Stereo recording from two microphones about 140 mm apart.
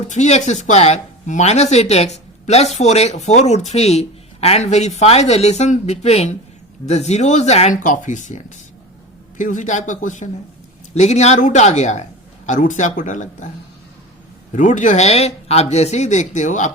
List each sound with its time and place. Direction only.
0.1 s speech: 55° left (ahead or behind)
14.5 s speech: 60° left (ahead or behind)